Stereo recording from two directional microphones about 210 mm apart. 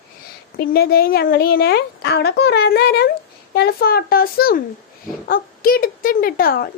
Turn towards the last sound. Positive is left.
turn(degrees=45)  # may be behind; listen again after turning